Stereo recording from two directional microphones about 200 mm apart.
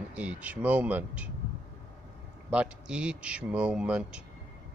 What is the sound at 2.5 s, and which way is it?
Speech, 5° right (ahead or behind).